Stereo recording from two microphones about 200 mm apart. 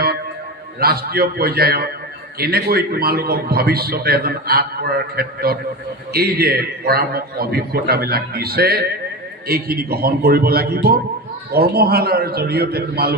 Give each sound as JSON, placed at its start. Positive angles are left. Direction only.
{"t": 0.7, "sound": "a man's voice", "side_deg": -50}